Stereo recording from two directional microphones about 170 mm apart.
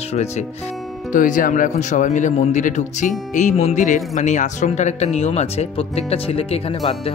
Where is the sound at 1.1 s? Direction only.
50° left (ahead or behind).